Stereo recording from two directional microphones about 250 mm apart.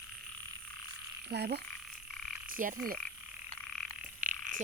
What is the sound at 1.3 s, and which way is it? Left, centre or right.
Croak, right.